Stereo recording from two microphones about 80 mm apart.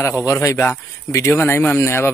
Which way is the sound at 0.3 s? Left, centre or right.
Left.